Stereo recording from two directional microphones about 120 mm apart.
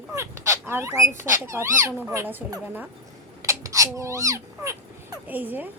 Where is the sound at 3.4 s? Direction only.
25° right (ahead or behind).